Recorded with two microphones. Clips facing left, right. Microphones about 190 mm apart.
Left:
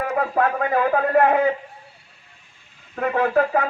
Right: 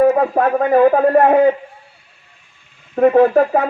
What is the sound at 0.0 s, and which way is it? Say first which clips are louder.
A man's voice: right 8 dB; 35° right (ahead or behind).